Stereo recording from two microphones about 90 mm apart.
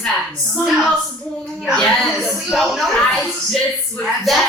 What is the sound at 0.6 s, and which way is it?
A woman's voice, 5° right (ahead or behind).